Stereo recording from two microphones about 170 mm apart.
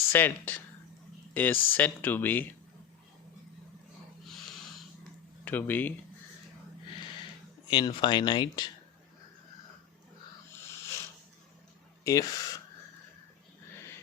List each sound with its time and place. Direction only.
0.1 s speech: 10° left (ahead or behind)
5.5 s speech: 10° left (ahead or behind)
7.7 s speech: 25° left (ahead or behind)
12.0 s speech: 20° left (ahead or behind)